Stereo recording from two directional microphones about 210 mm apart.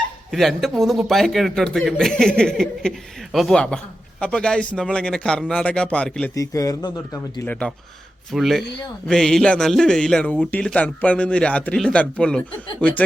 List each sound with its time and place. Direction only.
0.3 s a man's voice: centre (ahead or behind)
6.3 s a man's voice: 15° left (ahead or behind)